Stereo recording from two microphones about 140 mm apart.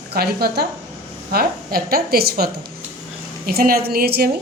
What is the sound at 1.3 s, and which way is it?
Speech, 90° right.